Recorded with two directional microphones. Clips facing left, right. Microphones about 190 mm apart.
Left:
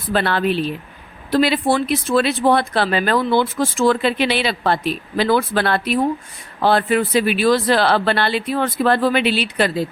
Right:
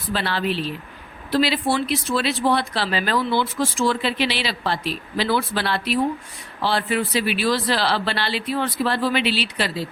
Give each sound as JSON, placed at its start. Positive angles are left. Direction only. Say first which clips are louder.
{"t": 0.1, "sound": "speech", "louder": "left 5 dB", "side_deg": 55}